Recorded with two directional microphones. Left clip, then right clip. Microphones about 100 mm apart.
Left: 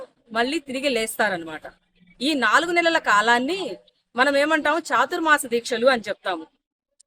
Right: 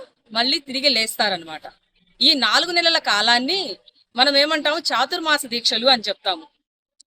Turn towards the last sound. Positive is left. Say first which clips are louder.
# right 3 dB
turn(degrees=30)  # may be behind; listen again after turning